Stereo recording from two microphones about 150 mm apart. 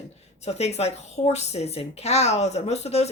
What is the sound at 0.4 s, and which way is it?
A woman's voice, 45° left (ahead or behind).